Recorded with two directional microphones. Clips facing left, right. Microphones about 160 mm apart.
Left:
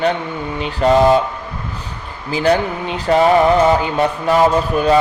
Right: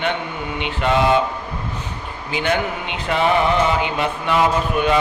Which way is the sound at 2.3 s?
35° left (ahead or behind).